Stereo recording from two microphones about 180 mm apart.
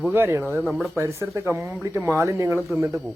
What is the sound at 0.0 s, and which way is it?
Speech, 10° right (ahead or behind).